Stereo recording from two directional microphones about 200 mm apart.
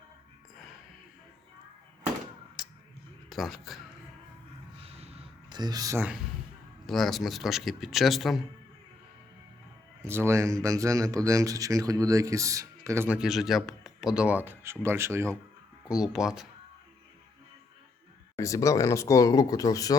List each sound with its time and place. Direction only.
2.6 s a sound: centre (ahead or behind)
3.2 s a man's voice: centre (ahead or behind)
4.8 s a sound: 30° right (ahead or behind); by 6.1 s 10° right (ahead or behind)
6.8 s a man's voice: centre (ahead or behind)
10.0 s speech: 15° right (ahead or behind)
15.9 s a man's voice: centre (ahead or behind)
18.3 s speech: 15° left (ahead or behind)